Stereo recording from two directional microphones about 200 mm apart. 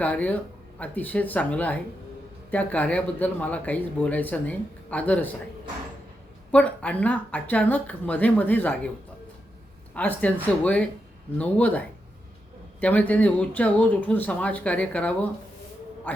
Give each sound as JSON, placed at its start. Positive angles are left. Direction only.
{"t": 0.0, "sound": "speech", "side_deg": 5}
{"t": 6.5, "sound": "speech", "side_deg": 5}
{"t": 9.9, "sound": "speech", "side_deg": 10}
{"t": 12.8, "sound": "speech", "side_deg": 5}